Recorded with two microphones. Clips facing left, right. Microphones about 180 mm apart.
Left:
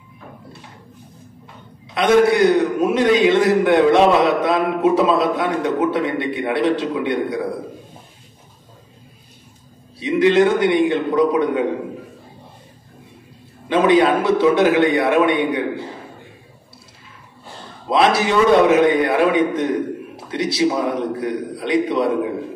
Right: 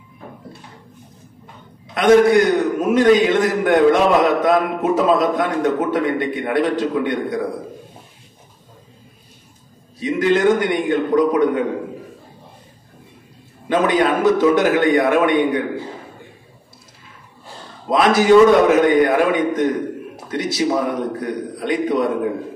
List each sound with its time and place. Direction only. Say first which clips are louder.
2.0 s a man's voice: right 2 dB; 45° right (ahead or behind)
9.9 s a man's voice: left 3 dB; 45° right (ahead or behind)
13.7 s a man's voice: left 2 dB; 45° right (ahead or behind)
17.8 s a man's voice: right 3 dB; 45° right (ahead or behind)